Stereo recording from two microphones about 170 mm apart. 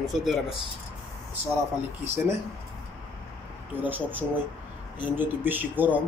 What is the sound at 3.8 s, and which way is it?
Speech, 10° right (ahead or behind).